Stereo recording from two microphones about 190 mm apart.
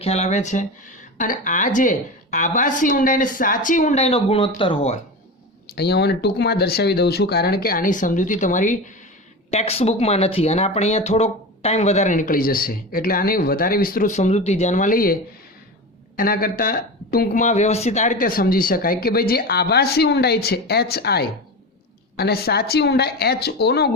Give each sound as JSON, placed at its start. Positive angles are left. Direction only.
{"t": 0.0, "sound": "speech", "side_deg": 35}
{"t": 5.7, "sound": "speech", "side_deg": 60}